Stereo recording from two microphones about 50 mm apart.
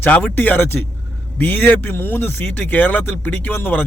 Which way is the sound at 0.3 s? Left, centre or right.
Left.